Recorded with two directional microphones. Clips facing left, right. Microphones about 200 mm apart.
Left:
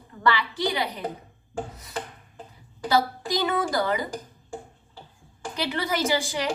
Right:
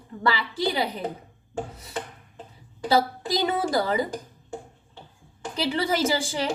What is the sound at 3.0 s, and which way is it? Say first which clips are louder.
A woman's voice: left 1 dB; 30° right (ahead or behind).